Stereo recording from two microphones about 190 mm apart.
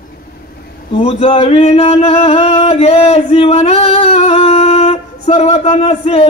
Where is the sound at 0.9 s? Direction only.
30° left (ahead or behind).